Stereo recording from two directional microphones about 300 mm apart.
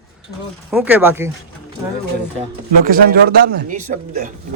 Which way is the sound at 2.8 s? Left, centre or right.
Right.